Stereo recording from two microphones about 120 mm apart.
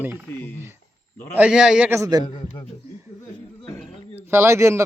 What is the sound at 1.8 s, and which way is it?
Speech, 20° right (ahead or behind).